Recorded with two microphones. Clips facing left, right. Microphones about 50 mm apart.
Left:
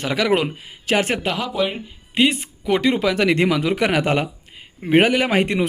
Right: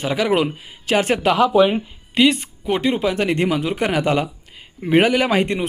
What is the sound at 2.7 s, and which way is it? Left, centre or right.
Speech, left.